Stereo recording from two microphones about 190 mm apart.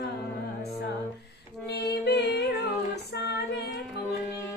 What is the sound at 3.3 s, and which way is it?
Female singing, 60° left (ahead or behind).